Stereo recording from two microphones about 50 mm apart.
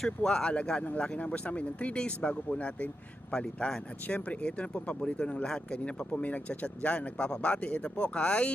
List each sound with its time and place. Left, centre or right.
0.0 s speech: centre
4.0 s speech: left
6.1 s speech: left